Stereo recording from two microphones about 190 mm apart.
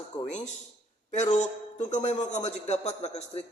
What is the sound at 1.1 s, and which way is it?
A man's voice, 35° left (ahead or behind).